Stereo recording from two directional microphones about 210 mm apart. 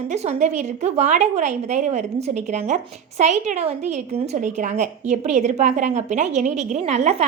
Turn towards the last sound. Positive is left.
turn(degrees=-30)  # may be behind; listen again after turning